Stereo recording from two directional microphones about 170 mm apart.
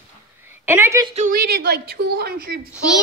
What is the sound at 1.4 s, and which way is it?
A woman's voice, 70° right (ahead or behind).